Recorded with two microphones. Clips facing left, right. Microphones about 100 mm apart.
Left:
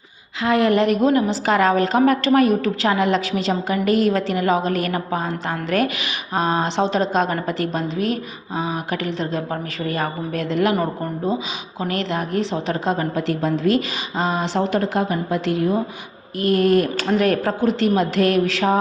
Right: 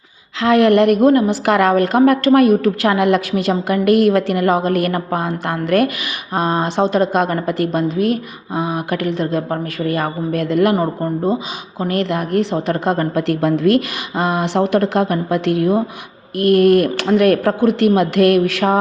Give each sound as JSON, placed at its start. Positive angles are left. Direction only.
{"t": 0.4, "sound": "a woman's voice", "side_deg": -75}
{"t": 11.8, "sound": "a woman's voice", "side_deg": -50}